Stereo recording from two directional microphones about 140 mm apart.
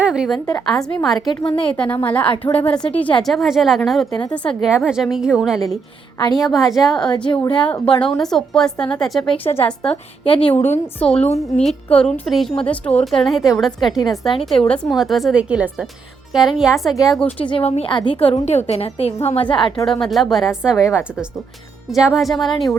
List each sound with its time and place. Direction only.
0.0 s a woman's voice: 5° right (ahead or behind)
1.3 s a woman's voice: 35° left (ahead or behind)
1.6 s a woman's voice: 10° left (ahead or behind)
6.1 s a woman's voice: 30° left (ahead or behind)
6.4 s a woman's voice: centre (ahead or behind)
9.2 s a woman's voice: 40° left (ahead or behind)
9.6 s a woman's voice: 5° left (ahead or behind)
10.2 s a woman's voice: 40° left (ahead or behind)
11.0 s a woman's voice: 10° left (ahead or behind)
13.2 s a woman's voice: centre (ahead or behind)
17.5 s a woman's voice: 45° left (ahead or behind)
19.8 s a woman's voice: centre (ahead or behind)